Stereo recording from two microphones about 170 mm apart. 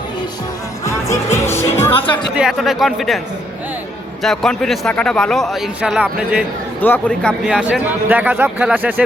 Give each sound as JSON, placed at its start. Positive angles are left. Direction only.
{"t": 0.9, "sound": "music", "side_deg": 15}
{"t": 2.3, "sound": "a man's voice", "side_deg": 0}
{"t": 4.2, "sound": "a man's voice", "side_deg": 0}
{"t": 6.8, "sound": "a man's voice", "side_deg": 10}
{"t": 7.4, "sound": "speech", "side_deg": -5}